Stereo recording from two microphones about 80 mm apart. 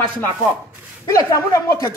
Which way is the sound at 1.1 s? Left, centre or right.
Left.